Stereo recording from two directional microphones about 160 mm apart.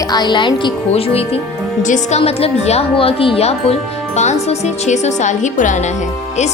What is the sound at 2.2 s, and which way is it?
A woman's voice, 40° left (ahead or behind).